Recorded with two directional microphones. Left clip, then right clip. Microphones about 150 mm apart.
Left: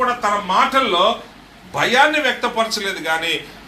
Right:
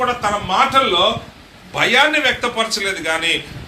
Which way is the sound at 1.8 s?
15° right (ahead or behind).